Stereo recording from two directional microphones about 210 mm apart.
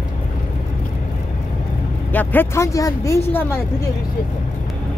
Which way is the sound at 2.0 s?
10° left (ahead or behind).